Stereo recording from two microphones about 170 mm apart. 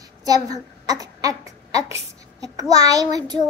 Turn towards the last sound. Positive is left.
turn(degrees=-25)  # may be behind; listen again after turning